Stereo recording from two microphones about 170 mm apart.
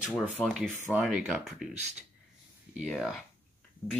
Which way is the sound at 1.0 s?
5° right (ahead or behind).